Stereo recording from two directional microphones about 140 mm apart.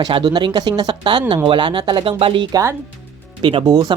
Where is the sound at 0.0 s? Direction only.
35° right (ahead or behind).